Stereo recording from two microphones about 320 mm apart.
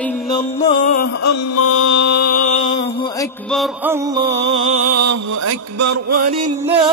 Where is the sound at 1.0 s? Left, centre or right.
Left.